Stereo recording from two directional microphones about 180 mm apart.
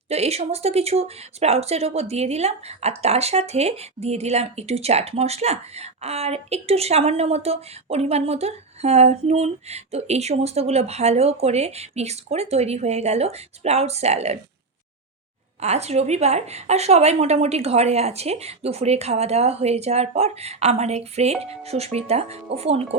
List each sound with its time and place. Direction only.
0.1 s speech: 35° right (ahead or behind)
15.6 s speech: 35° right (ahead or behind)